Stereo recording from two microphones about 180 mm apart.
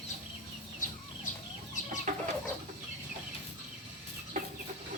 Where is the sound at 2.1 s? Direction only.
40° right (ahead or behind).